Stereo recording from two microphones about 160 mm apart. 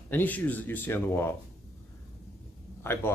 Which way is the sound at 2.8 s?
15° left (ahead or behind).